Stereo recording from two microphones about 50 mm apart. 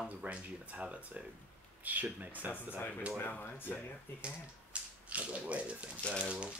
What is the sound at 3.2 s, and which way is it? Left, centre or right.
Speech, left.